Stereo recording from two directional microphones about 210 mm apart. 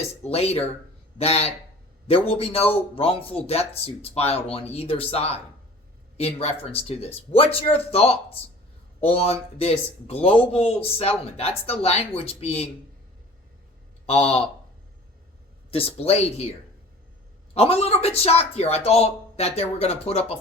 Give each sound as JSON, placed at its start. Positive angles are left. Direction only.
{"t": 0.3, "sound": "speech", "side_deg": 30}
{"t": 14.1, "sound": "speech", "side_deg": 30}
{"t": 15.7, "sound": "speech", "side_deg": 30}
{"t": 17.5, "sound": "speech", "side_deg": 30}